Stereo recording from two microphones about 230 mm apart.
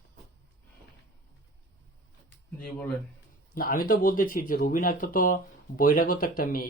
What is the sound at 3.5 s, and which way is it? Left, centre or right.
Speech, left.